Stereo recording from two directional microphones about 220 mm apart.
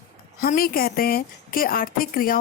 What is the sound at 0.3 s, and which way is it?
A woman's voice, 40° left (ahead or behind).